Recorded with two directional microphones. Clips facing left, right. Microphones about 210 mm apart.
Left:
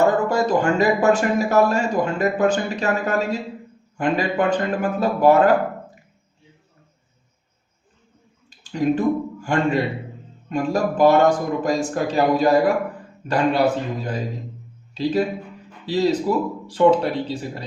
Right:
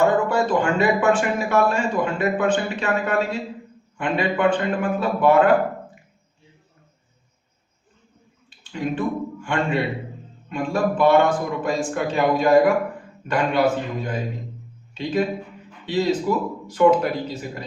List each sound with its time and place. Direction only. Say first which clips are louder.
0.0 s speech: left 1 dB; 40° left (ahead or behind)
8.4 s speech: left 6 dB; 40° left (ahead or behind)
14.9 s speech: left 2 dB; 35° left (ahead or behind)